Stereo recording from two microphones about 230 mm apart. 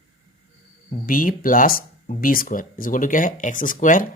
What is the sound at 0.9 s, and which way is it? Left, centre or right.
Speech, left.